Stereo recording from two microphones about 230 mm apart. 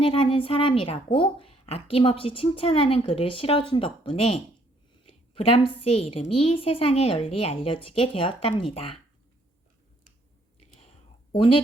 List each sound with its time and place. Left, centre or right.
0.0 s a woman's voice: left